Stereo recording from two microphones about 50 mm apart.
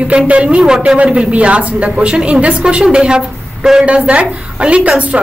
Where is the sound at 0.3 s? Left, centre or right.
Right.